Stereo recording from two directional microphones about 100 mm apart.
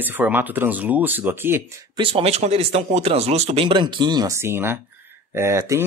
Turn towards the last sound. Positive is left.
turn(degrees=-30)  # may be behind; listen again after turning